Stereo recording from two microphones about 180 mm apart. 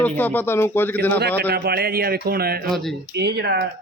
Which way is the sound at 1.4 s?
65° right (ahead or behind).